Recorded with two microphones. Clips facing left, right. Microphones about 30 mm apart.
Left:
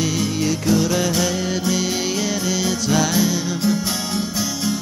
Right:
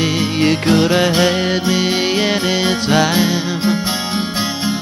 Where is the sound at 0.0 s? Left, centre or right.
Right.